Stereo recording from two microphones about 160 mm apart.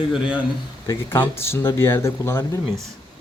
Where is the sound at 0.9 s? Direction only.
15° left (ahead or behind).